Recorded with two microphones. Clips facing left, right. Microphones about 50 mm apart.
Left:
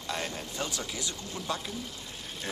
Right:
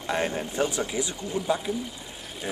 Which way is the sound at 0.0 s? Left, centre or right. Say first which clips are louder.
Right 8 dB; right.